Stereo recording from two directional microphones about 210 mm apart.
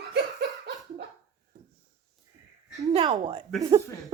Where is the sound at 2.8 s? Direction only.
20° right (ahead or behind).